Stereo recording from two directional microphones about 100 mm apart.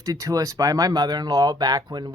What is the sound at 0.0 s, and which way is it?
Speech, 35° right (ahead or behind).